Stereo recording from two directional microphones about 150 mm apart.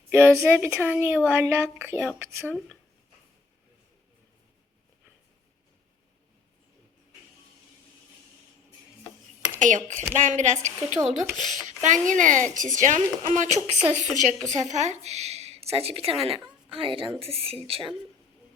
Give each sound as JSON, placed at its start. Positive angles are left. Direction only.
{"t": 0.1, "sound": "speech", "side_deg": -15}
{"t": 9.6, "sound": "a woman's voice", "side_deg": -60}